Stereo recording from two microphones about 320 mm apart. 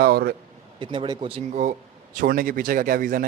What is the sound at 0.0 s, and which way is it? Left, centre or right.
Speech, right.